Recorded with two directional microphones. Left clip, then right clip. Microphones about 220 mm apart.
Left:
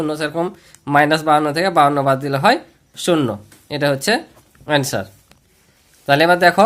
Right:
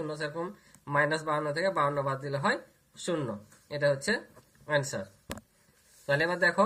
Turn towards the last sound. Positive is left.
turn(degrees=45)  # may be behind; listen again after turning